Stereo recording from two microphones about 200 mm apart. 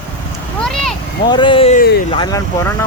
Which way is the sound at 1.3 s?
25° left (ahead or behind).